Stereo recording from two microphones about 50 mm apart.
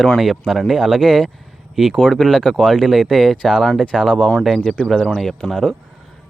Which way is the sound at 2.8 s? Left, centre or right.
Centre.